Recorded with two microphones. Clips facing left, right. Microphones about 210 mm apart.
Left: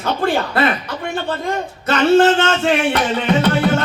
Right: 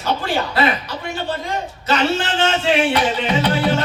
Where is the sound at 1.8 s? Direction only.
45° left (ahead or behind).